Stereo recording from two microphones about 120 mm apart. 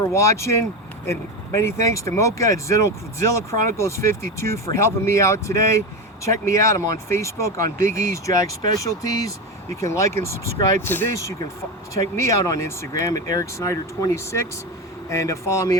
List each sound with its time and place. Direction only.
0.0 s speech: 25° left (ahead or behind)